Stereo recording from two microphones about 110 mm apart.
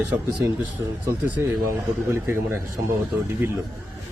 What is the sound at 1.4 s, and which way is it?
A man's voice, 20° right (ahead or behind).